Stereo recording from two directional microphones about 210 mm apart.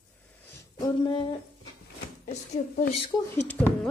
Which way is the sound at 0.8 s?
20° left (ahead or behind).